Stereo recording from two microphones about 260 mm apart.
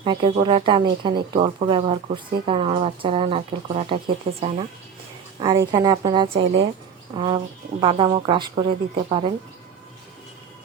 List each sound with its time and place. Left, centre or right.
0.0 s a woman's voice: centre